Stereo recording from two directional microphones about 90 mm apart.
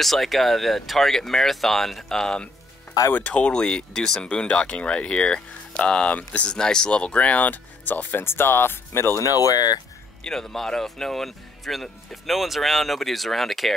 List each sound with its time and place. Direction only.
0.0 s speech: centre (ahead or behind); by 9.3 s 30° left (ahead or behind)
9.3 s speech: 45° left (ahead or behind)
10.2 s speech: 5° left (ahead or behind)